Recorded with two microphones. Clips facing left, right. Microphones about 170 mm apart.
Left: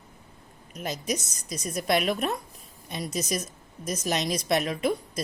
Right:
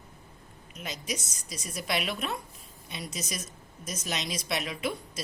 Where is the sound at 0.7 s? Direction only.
45° left (ahead or behind).